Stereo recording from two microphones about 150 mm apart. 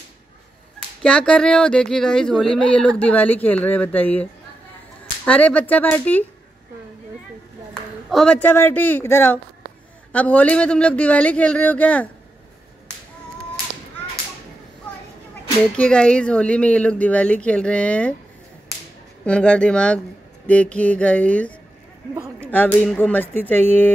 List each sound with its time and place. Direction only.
0.7 s speech: 5° left (ahead or behind)
7.7 s a woman's voice: 5° left (ahead or behind)
15.7 s speech: 5° left (ahead or behind)
19.2 s speech: 5° left (ahead or behind)
22.5 s a woman's voice: 10° left (ahead or behind)